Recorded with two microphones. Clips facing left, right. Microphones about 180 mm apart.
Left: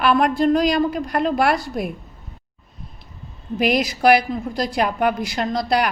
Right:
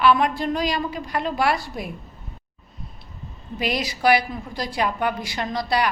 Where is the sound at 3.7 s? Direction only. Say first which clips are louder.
Left 4 dB; 50° left (ahead or behind).